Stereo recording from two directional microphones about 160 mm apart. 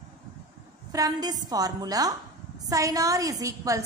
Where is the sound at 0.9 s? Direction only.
25° right (ahead or behind).